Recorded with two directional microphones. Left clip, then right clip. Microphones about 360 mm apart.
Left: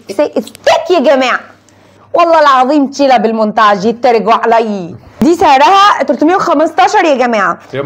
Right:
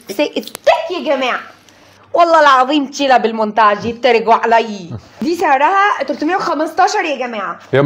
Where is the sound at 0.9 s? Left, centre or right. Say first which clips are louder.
Left 8 dB; left.